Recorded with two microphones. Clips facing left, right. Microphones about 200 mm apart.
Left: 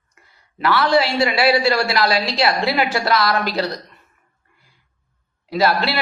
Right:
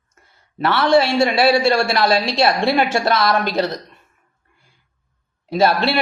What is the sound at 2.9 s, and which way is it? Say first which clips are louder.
Speech: right 1 dB; 25° right (ahead or behind).